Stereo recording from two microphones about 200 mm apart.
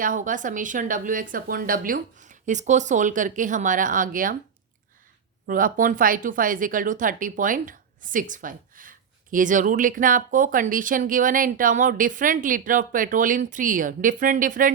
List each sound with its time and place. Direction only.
0.0 s speech: 40° right (ahead or behind)
5.5 s speech: 45° right (ahead or behind)